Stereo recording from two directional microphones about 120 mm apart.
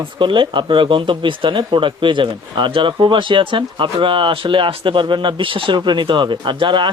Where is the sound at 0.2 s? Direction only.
40° right (ahead or behind).